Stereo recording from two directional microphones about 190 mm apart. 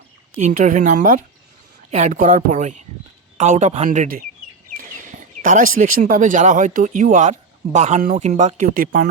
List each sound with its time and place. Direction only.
0.3 s a woman's voice: 40° right (ahead or behind)
5.4 s speech: 45° right (ahead or behind)